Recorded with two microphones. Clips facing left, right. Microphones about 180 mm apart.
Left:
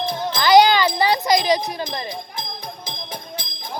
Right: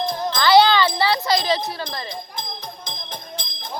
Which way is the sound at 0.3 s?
15° left (ahead or behind).